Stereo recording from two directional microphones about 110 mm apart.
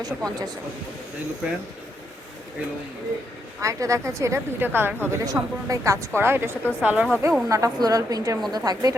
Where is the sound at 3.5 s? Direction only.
30° right (ahead or behind).